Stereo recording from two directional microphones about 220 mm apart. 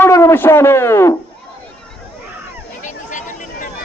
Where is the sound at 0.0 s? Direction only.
10° left (ahead or behind).